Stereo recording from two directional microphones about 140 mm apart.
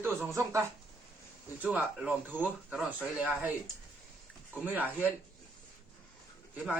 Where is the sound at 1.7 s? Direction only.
10° right (ahead or behind).